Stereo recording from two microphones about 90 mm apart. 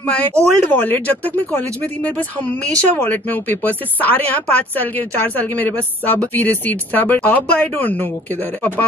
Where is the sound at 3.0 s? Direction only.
20° left (ahead or behind).